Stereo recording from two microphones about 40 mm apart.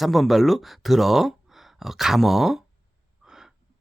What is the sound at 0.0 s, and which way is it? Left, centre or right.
Speech, centre.